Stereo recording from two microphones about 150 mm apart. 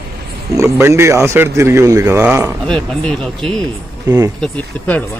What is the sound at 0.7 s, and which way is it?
A man's voice, 15° right (ahead or behind).